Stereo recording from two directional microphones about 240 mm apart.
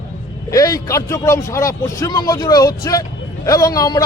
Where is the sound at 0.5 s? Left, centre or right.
Centre.